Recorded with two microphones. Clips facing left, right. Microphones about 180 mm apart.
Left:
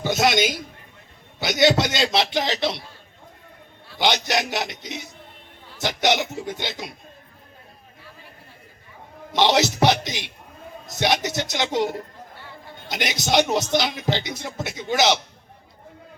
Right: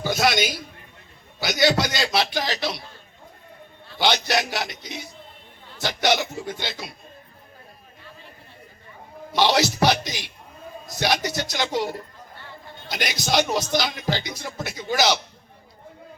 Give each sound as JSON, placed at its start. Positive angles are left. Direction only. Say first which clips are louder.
{"t": 0.0, "sound": "a sound", "louder": "left 2 dB", "side_deg": 20}
{"t": 1.4, "sound": "speech", "louder": "left 2 dB", "side_deg": 25}
{"t": 3.9, "sound": "speech", "louder": "even", "side_deg": 15}
{"t": 9.3, "sound": "speech", "louder": "left 1 dB", "side_deg": 20}